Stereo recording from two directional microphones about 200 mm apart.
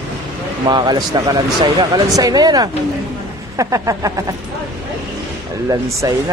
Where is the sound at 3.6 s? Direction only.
15° right (ahead or behind).